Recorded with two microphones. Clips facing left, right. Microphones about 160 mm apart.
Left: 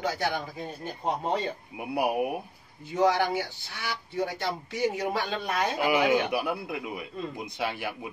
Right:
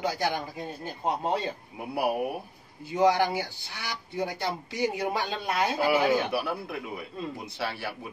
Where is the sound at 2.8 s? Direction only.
10° right (ahead or behind).